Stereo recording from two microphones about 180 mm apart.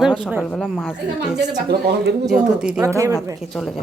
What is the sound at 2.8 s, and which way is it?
Speech, 20° right (ahead or behind).